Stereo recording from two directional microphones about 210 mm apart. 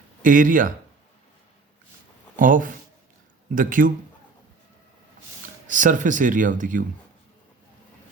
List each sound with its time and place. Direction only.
0.2 s speech: 40° right (ahead or behind)
2.3 s speech: 40° right (ahead or behind)
5.6 s speech: 35° right (ahead or behind)